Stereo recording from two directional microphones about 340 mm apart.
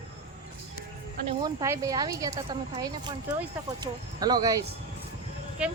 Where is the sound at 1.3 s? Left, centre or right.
Centre.